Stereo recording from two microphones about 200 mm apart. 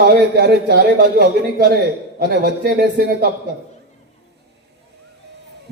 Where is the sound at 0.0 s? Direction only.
50° right (ahead or behind).